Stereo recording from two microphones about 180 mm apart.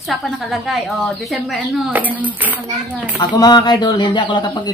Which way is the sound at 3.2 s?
20° left (ahead or behind).